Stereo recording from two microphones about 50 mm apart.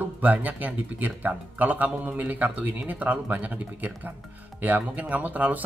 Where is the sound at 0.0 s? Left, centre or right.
Right.